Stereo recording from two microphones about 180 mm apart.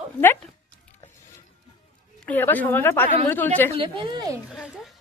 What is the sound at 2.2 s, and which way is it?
A woman's voice, 10° left (ahead or behind).